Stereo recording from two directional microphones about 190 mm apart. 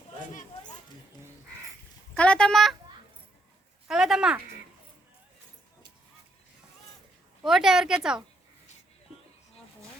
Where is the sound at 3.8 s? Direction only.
5° right (ahead or behind).